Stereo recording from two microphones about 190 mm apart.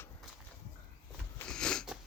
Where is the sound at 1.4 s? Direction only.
5° left (ahead or behind).